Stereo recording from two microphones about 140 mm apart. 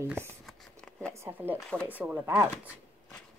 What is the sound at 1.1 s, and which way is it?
Speech, 15° right (ahead or behind).